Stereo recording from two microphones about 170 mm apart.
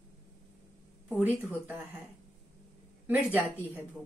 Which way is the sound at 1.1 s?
10° left (ahead or behind).